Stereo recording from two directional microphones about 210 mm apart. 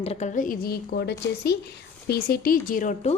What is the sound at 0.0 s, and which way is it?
A woman's voice, 30° left (ahead or behind).